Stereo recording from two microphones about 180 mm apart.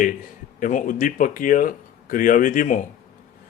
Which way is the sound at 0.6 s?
45° left (ahead or behind).